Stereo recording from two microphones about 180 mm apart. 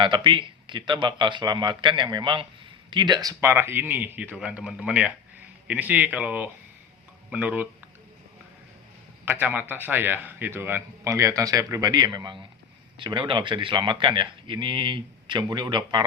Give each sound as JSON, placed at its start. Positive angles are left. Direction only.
{"t": 0.0, "sound": "a man's voice", "side_deg": -30}
{"t": 9.2, "sound": "a man's voice", "side_deg": -10}